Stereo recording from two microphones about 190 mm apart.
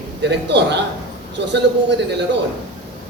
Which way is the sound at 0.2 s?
65° right (ahead or behind).